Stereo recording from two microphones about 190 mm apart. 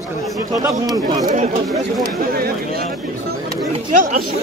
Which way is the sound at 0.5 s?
20° right (ahead or behind).